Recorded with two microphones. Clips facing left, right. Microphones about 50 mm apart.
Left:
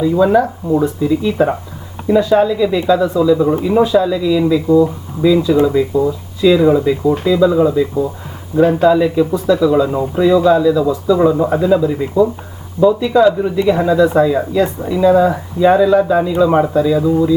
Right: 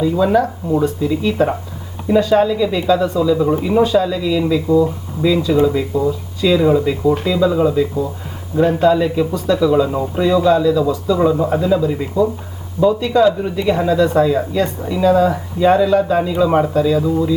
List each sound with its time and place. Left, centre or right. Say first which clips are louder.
0.0 s speech: left 3 dB; centre
3.5 s speech: left 2 dB; centre
3.8 s speech: left 2 dB; centre
16.1 s speech: left 2 dB; centre